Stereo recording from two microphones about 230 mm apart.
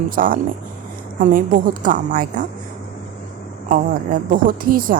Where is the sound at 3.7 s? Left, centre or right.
Right.